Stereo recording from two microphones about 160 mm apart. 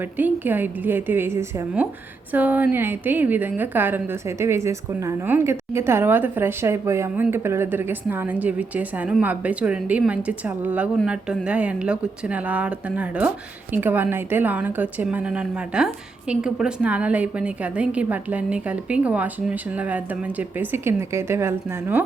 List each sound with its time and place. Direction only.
0.2 s a woman's voice: 10° right (ahead or behind)